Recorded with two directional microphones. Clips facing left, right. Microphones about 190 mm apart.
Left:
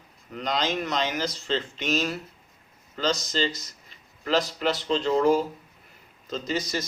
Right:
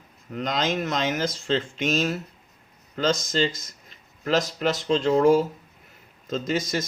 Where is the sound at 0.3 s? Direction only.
45° right (ahead or behind).